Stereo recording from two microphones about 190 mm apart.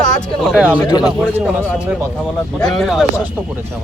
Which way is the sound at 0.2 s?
Centre (ahead or behind).